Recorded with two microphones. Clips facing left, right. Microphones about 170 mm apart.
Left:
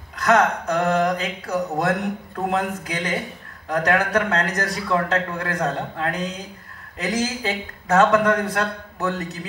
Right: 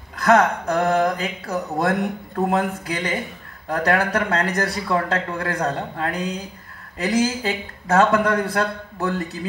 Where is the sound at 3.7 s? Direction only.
35° right (ahead or behind).